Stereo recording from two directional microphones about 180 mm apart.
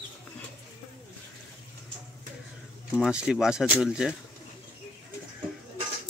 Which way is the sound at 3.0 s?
5° right (ahead or behind).